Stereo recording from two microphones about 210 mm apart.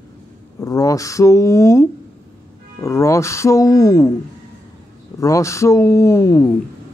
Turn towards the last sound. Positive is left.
turn(degrees=15)  # may be behind; listen again after turning